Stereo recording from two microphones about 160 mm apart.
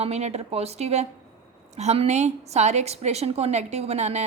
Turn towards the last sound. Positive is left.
turn(degrees=-45)  # may be behind; listen again after turning